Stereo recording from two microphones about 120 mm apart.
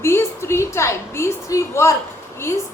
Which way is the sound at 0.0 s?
20° left (ahead or behind).